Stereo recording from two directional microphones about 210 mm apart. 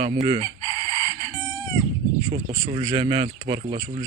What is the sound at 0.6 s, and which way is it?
Chicken, 15° left (ahead or behind).